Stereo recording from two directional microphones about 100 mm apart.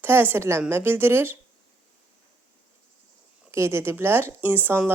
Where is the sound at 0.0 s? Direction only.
20° right (ahead or behind).